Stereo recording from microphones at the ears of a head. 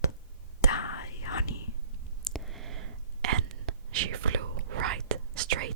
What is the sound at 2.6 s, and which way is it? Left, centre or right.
Whispering, right.